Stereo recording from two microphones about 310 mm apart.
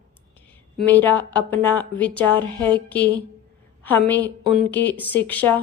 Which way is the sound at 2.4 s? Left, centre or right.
Centre.